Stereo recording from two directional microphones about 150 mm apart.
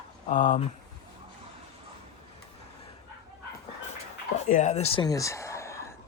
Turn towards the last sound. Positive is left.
turn(degrees=20)  # may be behind; listen again after turning